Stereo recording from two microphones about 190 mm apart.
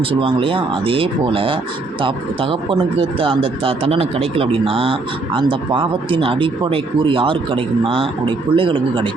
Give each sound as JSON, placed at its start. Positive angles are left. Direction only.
{"t": 0.0, "sound": "speech", "side_deg": -30}